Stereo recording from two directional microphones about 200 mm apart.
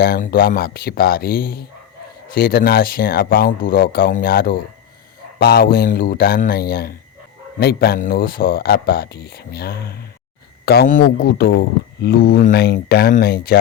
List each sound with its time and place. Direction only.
0.0 s speech: 50° left (ahead or behind)